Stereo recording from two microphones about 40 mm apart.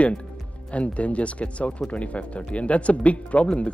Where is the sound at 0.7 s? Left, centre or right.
Left.